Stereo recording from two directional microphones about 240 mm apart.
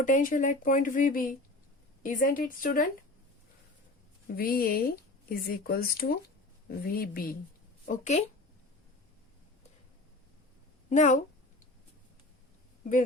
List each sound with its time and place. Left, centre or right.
0.0 s speech: left
4.4 s speech: left
10.8 s a woman's voice: left